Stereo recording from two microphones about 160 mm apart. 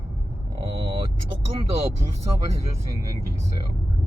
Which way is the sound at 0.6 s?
35° right (ahead or behind).